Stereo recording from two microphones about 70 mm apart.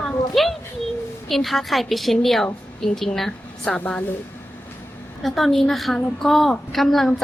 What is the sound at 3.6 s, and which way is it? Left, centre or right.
Speech, centre.